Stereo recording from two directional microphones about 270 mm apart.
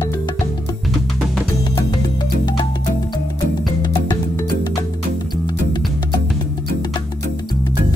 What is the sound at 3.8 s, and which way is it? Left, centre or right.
Music, centre.